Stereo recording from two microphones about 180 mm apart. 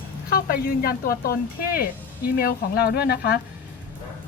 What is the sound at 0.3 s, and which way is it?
Speech, 55° left (ahead or behind).